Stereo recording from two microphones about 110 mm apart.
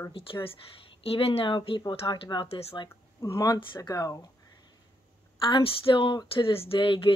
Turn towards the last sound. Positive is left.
turn(degrees=50)  # may be behind; listen again after turning